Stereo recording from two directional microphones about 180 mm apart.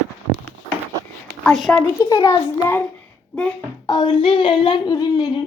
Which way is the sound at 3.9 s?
25° left (ahead or behind).